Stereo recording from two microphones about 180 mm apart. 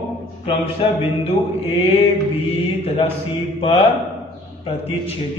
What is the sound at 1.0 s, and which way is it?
Mantra, 35° left (ahead or behind).